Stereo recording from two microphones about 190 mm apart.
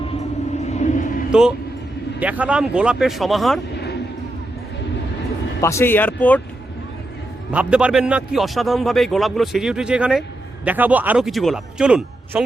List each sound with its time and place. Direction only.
0.6 s a sound: 35° left (ahead or behind)
1.3 s a man's voice: 5° right (ahead or behind)
5.5 s speech: 15° left (ahead or behind)
7.5 s a man's voice: 5° right (ahead or behind)